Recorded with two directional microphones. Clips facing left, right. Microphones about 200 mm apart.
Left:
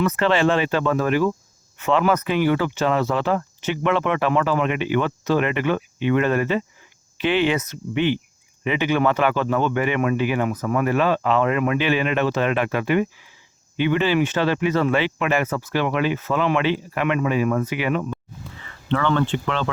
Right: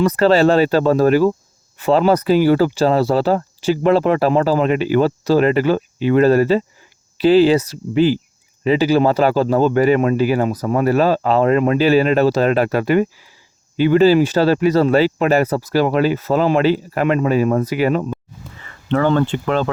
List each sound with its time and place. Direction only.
0.0 s speech: 35° right (ahead or behind)